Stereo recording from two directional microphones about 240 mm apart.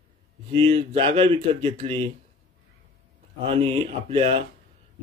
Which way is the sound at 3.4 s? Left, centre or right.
Right.